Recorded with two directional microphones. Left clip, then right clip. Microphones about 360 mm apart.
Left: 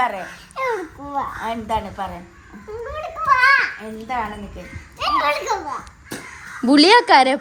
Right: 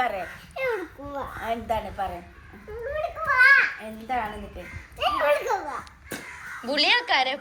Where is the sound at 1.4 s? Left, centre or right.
Left.